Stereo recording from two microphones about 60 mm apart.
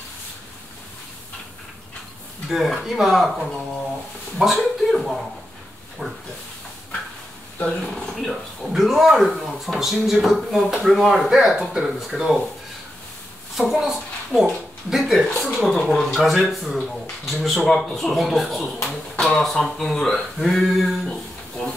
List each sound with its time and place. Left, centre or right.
2.5 s a man's voice: centre
7.6 s speech: centre
8.0 s speech: centre
13.6 s speech: centre